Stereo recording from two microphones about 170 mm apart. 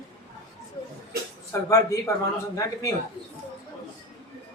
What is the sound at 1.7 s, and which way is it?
Speech, 15° left (ahead or behind).